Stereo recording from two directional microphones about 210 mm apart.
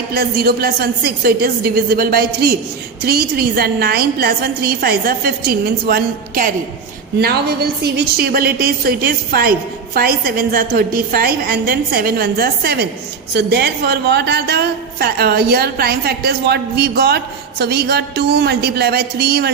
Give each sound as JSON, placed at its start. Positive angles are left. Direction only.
{"t": 0.1, "sound": "a woman's voice", "side_deg": -45}